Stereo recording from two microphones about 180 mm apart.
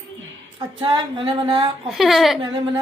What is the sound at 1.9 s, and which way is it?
Speech, centre (ahead or behind).